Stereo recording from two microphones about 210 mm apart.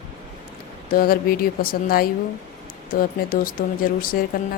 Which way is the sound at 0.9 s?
45° left (ahead or behind).